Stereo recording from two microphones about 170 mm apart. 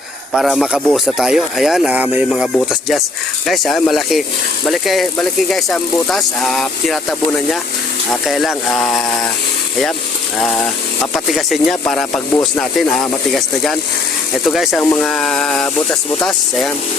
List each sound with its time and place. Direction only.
0.3 s speech: centre (ahead or behind)
11.0 s speech: centre (ahead or behind)